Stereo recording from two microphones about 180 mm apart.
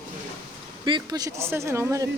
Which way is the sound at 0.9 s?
25° right (ahead or behind).